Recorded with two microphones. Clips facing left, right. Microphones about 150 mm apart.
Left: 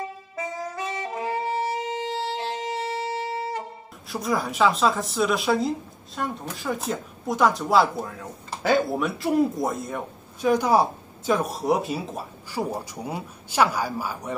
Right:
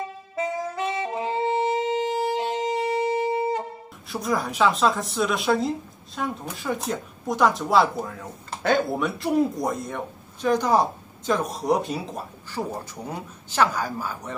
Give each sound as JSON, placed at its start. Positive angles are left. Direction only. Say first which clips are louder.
{"t": 1.1, "sound": "music", "louder": "right 1 dB", "side_deg": -20}
{"t": 4.1, "sound": "speech", "louder": "even", "side_deg": 0}